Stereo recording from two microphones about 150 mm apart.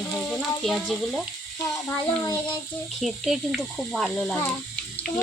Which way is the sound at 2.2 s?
25° left (ahead or behind).